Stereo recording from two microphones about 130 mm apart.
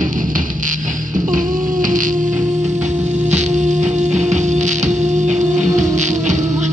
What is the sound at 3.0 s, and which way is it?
Music, 60° right (ahead or behind).